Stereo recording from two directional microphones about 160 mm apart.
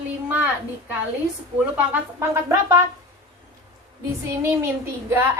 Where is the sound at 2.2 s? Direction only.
20° right (ahead or behind).